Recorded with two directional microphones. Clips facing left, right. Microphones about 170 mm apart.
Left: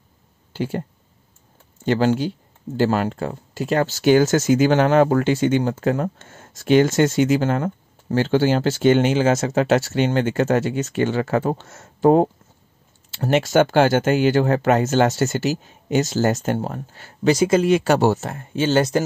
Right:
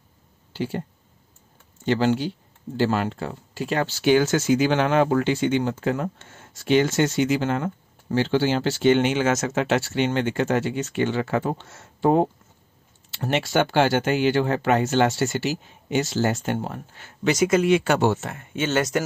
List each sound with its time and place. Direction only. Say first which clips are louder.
0.5 s speech: left 3 dB; 50° left (ahead or behind)
1.9 s speech: left 3 dB; 45° left (ahead or behind)